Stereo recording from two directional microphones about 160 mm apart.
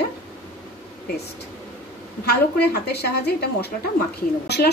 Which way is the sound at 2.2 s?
85° left.